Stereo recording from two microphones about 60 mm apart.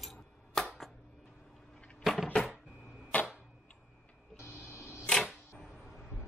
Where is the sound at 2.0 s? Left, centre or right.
Centre.